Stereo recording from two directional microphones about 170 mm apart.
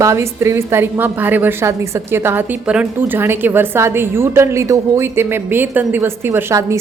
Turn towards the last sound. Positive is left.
turn(degrees=-15)  # may be behind; listen again after turning